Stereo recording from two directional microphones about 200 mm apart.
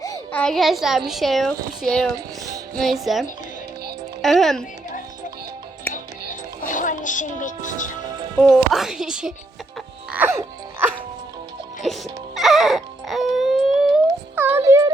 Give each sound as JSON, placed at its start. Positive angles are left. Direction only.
{"t": 0.0, "sound": "a child's voice", "side_deg": 15}
{"t": 6.7, "sound": "speech", "side_deg": 40}
{"t": 8.4, "sound": "speech", "side_deg": 0}
{"t": 10.1, "sound": "music", "side_deg": -10}
{"t": 12.3, "sound": "music", "side_deg": 0}
{"t": 14.3, "sound": "music", "side_deg": -15}